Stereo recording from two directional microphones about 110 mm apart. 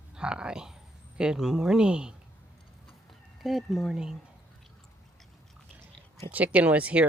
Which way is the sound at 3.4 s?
Centre (ahead or behind).